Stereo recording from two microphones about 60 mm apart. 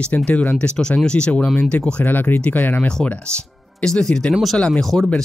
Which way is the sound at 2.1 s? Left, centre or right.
Left.